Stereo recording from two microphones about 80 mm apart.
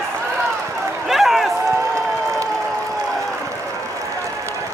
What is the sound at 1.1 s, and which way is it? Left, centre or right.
Run, centre.